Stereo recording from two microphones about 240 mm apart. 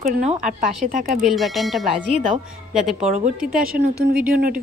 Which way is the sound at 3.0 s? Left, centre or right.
Right.